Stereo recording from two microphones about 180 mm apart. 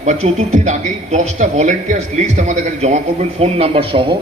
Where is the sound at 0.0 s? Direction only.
40° right (ahead or behind).